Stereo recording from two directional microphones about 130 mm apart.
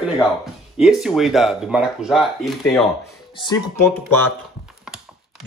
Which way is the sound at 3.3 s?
35° left (ahead or behind).